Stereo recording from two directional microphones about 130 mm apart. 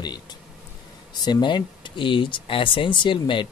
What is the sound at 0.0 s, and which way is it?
Speech, 35° left (ahead or behind).